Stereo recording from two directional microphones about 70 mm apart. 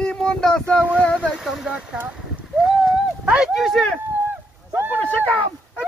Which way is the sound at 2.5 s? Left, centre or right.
Centre.